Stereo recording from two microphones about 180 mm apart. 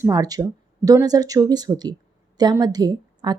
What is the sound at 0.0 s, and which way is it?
Speech, 20° right (ahead or behind).